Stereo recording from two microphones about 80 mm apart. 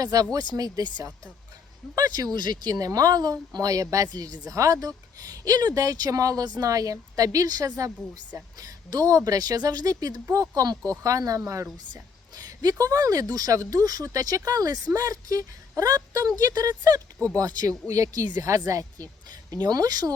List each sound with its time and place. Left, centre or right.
0.0 s speech: right
12.4 s speech: right
19.5 s speech: right